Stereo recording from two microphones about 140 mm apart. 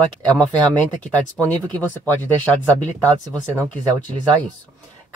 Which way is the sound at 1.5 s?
10° left (ahead or behind).